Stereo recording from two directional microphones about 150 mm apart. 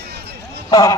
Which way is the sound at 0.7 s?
25° left (ahead or behind).